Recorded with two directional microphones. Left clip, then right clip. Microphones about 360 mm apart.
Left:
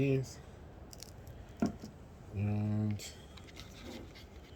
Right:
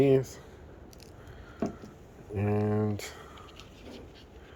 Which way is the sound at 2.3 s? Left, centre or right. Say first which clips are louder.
Right 11 dB; right.